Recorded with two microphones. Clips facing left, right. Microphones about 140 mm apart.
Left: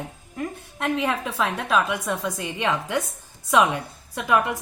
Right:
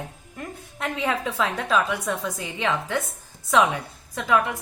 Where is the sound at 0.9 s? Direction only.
10° left (ahead or behind).